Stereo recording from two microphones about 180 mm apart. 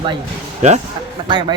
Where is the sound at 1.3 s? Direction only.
25° right (ahead or behind).